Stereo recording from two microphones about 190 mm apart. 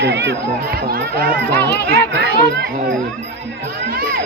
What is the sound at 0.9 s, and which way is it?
Speech, 50° right (ahead or behind).